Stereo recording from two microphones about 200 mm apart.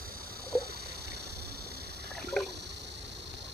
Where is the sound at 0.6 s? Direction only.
50° right (ahead or behind).